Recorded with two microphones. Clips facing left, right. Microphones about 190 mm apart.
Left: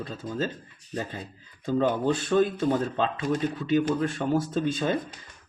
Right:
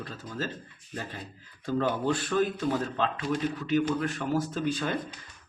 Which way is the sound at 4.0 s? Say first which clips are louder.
Left 3 dB; 25° left (ahead or behind).